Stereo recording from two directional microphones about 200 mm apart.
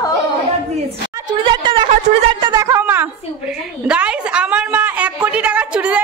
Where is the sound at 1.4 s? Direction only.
25° right (ahead or behind).